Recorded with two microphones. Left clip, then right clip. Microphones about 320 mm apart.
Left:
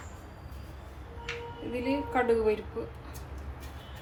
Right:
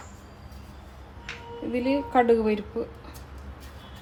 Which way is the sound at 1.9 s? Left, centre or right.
Right.